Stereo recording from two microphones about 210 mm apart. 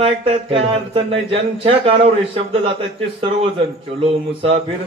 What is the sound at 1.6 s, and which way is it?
A man's voice, 25° right (ahead or behind).